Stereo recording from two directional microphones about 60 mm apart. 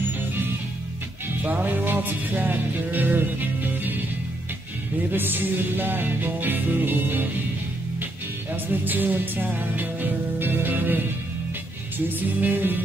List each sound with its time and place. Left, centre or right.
1.4 s music: right
5.1 s music: right
8.8 s music: right
12.1 s music: right